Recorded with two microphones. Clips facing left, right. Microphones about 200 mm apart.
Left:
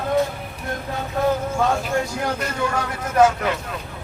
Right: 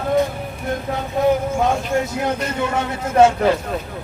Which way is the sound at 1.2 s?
20° right (ahead or behind).